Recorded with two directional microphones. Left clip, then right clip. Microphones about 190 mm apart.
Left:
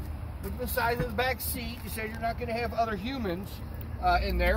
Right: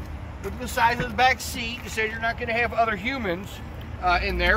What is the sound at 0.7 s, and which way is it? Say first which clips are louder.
Speech: right 8 dB; 55° left (ahead or behind).